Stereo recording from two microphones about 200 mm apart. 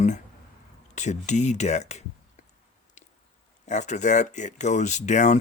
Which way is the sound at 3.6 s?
35° left (ahead or behind).